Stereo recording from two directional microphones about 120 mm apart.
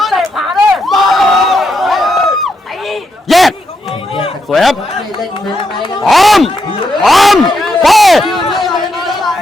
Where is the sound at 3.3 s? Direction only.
Centre (ahead or behind).